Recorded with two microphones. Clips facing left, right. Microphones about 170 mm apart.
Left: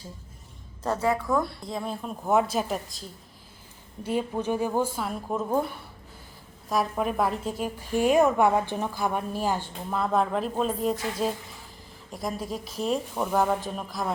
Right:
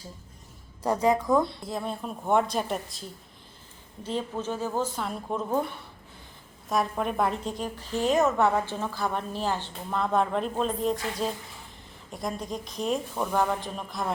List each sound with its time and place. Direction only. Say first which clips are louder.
0.8 s a woman's voice: right 2 dB; 15° right (ahead or behind)
1.6 s a woman's voice: even; centre (ahead or behind)
4.0 s a woman's voice: left 3 dB; 10° left (ahead or behind)
6.7 s a woman's voice: left 1 dB; centre (ahead or behind)
12.1 s a woman's voice: left 1 dB; centre (ahead or behind)